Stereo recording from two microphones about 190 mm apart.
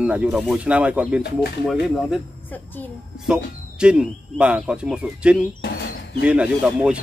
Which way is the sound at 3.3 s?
5° right (ahead or behind).